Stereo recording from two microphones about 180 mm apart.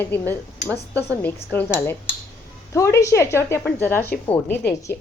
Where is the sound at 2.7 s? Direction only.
15° left (ahead or behind).